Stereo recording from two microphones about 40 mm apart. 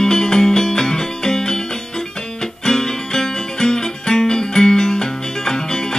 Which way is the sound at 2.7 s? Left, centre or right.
Centre.